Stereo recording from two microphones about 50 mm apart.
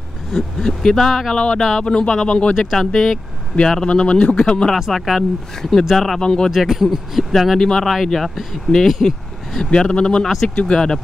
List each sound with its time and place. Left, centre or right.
0.3 s speech: centre
1.3 s a man's voice: left
2.5 s speech: centre
3.8 s a man's voice: centre
4.7 s speech: centre
5.6 s speech: centre
6.5 s speech: centre
7.5 s speech: centre
9.0 s a sound: centre
9.7 s speech: centre
10.2 s speech: centre